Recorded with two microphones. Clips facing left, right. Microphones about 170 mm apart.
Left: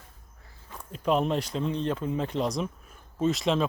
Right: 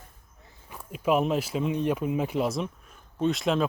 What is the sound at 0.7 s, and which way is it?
Speech, 10° right (ahead or behind).